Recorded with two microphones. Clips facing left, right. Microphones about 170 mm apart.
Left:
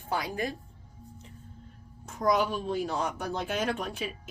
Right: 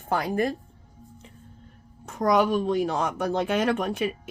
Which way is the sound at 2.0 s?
60° right (ahead or behind).